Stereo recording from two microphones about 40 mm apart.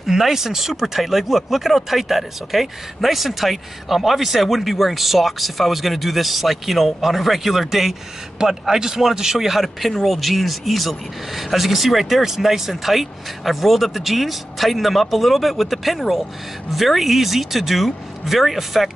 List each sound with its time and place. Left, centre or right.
0.0 s speech: centre
8.4 s a man's voice: centre